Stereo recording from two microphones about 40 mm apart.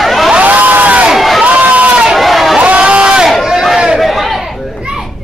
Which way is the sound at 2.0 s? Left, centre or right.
Centre.